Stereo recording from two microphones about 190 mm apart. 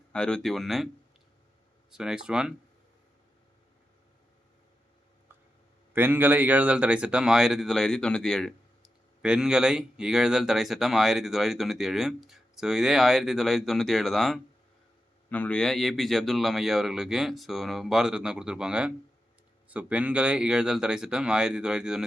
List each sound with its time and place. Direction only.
0.1 s speech: 5° left (ahead or behind)
1.9 s speech: 5° right (ahead or behind)
5.9 s speech: 10° right (ahead or behind)